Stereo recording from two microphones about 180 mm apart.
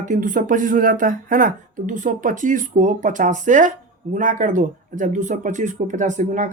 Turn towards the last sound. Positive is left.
turn(degrees=-45)  # may be behind; listen again after turning